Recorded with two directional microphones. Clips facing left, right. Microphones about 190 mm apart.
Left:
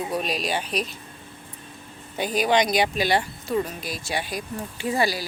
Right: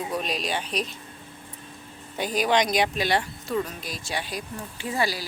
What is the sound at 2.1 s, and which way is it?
Speech, centre (ahead or behind).